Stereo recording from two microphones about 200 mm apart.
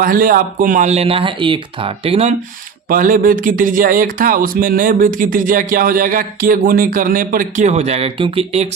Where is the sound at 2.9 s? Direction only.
45° right (ahead or behind).